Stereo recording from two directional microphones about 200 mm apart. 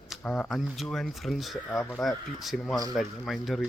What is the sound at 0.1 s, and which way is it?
Speech, 5° left (ahead or behind).